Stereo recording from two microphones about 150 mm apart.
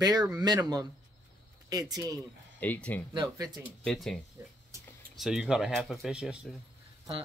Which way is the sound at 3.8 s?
Centre (ahead or behind).